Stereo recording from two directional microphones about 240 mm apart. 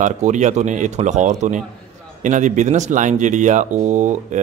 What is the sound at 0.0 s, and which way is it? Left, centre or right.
Speech, right.